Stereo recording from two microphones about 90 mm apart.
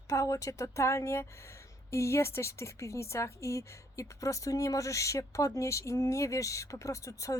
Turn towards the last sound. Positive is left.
turn(degrees=40)  # may be behind; listen again after turning